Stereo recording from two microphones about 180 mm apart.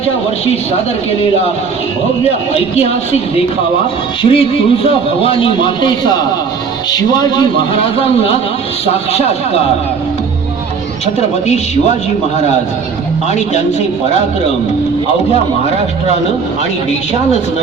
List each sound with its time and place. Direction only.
2.5 s speech: 35° left (ahead or behind)
4.2 s speech: 30° left (ahead or behind)
11.0 s speech: 35° left (ahead or behind)